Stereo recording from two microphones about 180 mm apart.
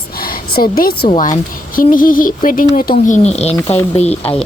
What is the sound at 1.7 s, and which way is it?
Speech, 50° left (ahead or behind).